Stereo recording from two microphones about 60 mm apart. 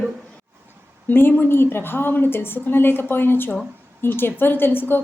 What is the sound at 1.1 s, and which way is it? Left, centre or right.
A woman's voice, left.